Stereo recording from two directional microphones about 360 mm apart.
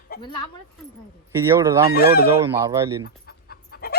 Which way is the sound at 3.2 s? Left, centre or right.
Left.